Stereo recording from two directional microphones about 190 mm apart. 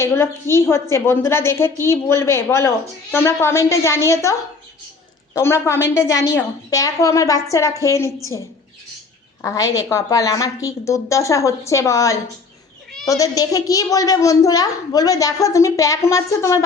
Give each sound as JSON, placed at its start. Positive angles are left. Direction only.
{"t": 0.0, "sound": "a woman's voice", "side_deg": 15}
{"t": 9.4, "sound": "a woman's voice", "side_deg": 15}